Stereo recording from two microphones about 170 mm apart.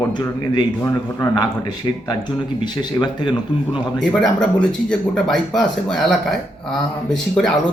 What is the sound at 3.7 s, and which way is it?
Speech, centre (ahead or behind).